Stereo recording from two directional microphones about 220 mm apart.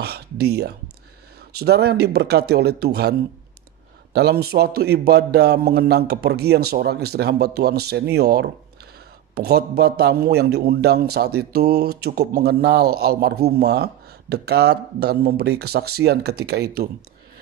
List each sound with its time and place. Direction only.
0.0 s a man's voice: 45° right (ahead or behind)